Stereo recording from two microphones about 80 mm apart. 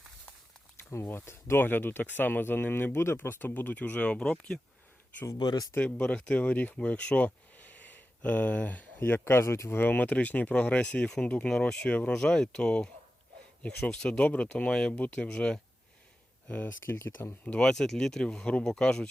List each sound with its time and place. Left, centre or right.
1.0 s speech: left; by 4.6 s centre
5.4 s speech: left
5.8 s speech: centre
16.8 s speech: left
17.4 s speech: centre